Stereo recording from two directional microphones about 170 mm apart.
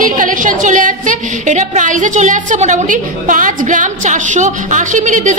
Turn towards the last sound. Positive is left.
turn(degrees=-45)  # may be behind; listen again after turning